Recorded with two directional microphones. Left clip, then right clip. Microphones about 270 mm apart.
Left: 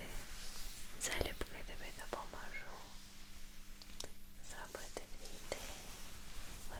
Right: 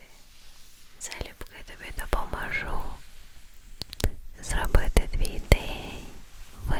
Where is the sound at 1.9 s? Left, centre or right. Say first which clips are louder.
Right 16 dB; right.